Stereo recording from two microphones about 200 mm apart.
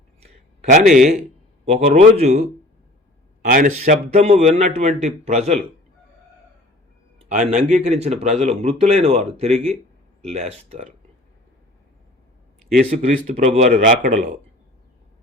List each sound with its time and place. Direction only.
0.2 s a sound: 35° right (ahead or behind)
1.6 s speech: 35° right (ahead or behind)
3.4 s speech: 45° right (ahead or behind)
7.3 s speech: 40° right (ahead or behind)
13.0 s speech: 35° right (ahead or behind)